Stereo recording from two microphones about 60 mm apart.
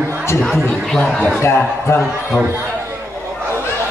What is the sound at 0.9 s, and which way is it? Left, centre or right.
Speech, centre.